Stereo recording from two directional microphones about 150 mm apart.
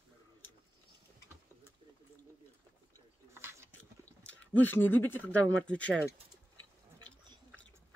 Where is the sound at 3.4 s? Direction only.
15° right (ahead or behind).